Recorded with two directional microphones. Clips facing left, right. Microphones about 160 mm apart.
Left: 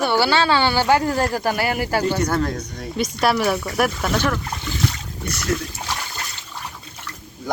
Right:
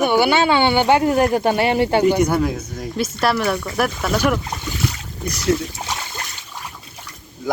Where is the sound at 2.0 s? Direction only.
10° right (ahead or behind).